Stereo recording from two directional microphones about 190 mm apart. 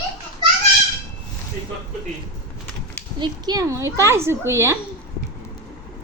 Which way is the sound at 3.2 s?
20° right (ahead or behind).